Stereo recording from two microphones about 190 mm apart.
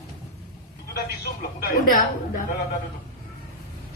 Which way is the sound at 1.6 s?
45° left (ahead or behind).